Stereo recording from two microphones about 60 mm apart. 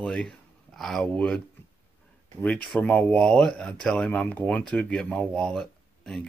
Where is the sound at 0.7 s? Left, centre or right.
Centre.